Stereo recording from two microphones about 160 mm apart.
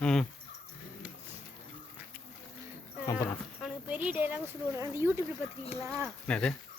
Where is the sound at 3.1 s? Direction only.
15° left (ahead or behind).